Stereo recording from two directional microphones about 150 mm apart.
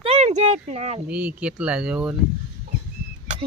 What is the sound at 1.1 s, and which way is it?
Speech, 10° right (ahead or behind).